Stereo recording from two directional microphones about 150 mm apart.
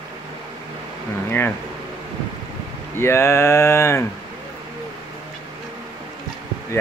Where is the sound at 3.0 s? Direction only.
15° left (ahead or behind).